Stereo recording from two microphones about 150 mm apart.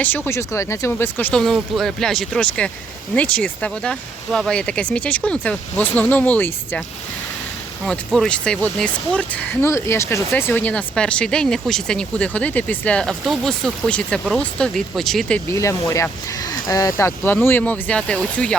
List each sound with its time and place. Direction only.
0.0 s speech: 15° left (ahead or behind)
7.9 s speech: 5° left (ahead or behind)
15.4 s speech: 20° left (ahead or behind)